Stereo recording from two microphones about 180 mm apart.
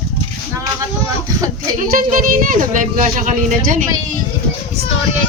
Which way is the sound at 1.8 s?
50° right (ahead or behind).